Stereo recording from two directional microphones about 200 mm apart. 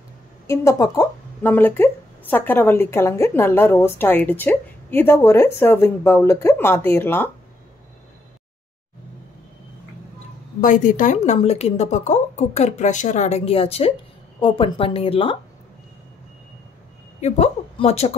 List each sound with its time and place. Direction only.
0.5 s speech: 15° left (ahead or behind)
10.6 s speech: 40° left (ahead or behind)
17.2 s speech: 35° left (ahead or behind)